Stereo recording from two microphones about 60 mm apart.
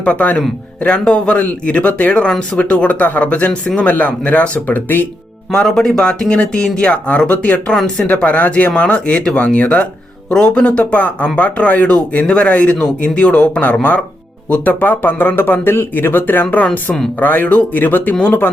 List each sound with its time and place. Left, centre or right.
0.0 s speech: left
5.5 s speech: centre; by 16.6 s left
16.6 s speech: centre
17.2 s speech: left